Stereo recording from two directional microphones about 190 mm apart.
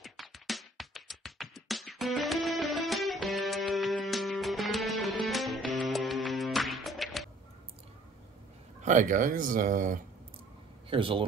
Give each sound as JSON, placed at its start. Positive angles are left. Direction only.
{"t": 0.0, "sound": "music", "side_deg": 0}
{"t": 8.8, "sound": "speech", "side_deg": -40}
{"t": 10.9, "sound": "speech", "side_deg": -25}